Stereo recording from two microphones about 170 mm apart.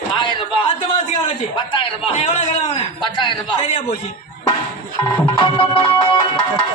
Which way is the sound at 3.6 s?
45° left (ahead or behind).